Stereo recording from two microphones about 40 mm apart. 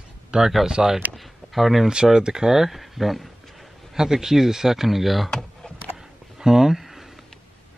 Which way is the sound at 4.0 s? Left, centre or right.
Centre.